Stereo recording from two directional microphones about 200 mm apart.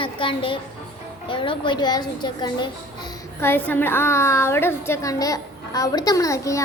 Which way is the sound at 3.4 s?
10° left (ahead or behind).